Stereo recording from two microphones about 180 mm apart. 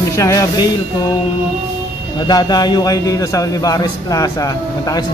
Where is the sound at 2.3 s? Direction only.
20° left (ahead or behind).